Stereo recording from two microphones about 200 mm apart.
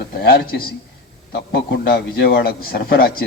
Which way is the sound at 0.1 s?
50° left (ahead or behind).